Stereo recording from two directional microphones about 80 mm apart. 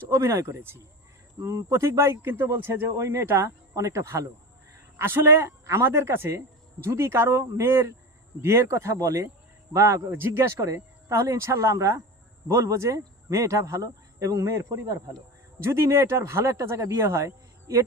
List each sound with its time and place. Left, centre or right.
0.1 s speech: right
2.2 s speech: right
10.1 s speech: right
15.6 s speech: right